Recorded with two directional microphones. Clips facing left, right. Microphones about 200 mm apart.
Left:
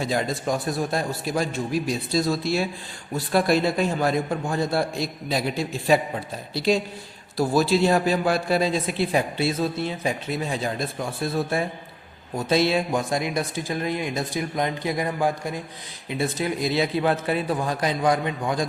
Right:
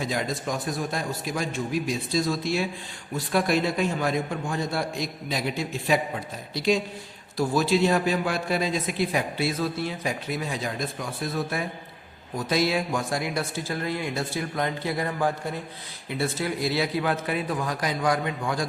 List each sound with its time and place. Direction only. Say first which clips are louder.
0.0 s a man's voice: left 3 dB; 30° left (ahead or behind)